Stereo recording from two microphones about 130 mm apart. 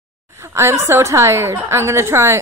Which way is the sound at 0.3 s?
20° right (ahead or behind).